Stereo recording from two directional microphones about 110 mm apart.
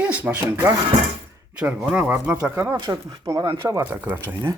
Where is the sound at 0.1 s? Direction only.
15° right (ahead or behind).